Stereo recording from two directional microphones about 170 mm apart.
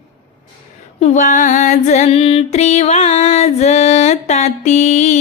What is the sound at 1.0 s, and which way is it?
Female singing, 45° left (ahead or behind).